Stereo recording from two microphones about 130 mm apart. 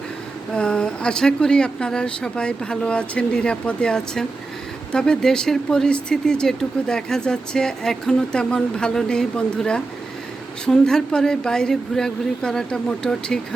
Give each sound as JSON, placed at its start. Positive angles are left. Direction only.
{"t": 0.5, "sound": "speech", "side_deg": 5}